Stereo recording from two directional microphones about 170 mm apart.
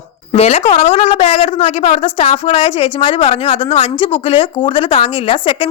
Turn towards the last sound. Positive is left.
turn(degrees=30)  # may be behind; listen again after turning